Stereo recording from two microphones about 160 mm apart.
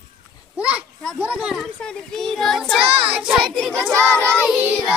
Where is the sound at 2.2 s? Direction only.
5° left (ahead or behind).